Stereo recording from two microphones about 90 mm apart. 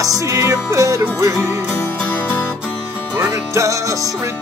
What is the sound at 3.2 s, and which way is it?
Music, 35° right (ahead or behind).